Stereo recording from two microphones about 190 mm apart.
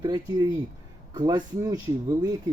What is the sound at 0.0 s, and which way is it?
Speech, 20° right (ahead or behind).